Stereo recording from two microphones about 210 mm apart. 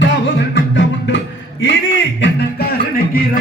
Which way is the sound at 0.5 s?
60° left (ahead or behind).